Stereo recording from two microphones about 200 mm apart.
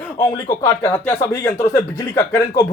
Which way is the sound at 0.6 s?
15° left (ahead or behind).